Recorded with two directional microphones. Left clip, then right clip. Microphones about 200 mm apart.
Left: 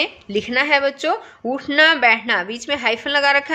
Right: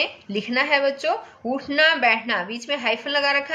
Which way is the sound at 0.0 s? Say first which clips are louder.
Left 4 dB; 50° left (ahead or behind).